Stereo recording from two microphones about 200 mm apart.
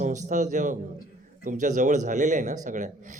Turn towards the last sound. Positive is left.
turn(degrees=-40)  # may be behind; listen again after turning